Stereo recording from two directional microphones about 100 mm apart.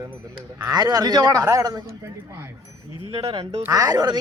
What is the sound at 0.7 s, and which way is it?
Speech, 40° right (ahead or behind).